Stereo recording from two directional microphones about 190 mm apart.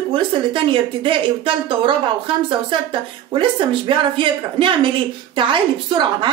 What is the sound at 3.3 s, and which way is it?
A woman's voice, 25° right (ahead or behind).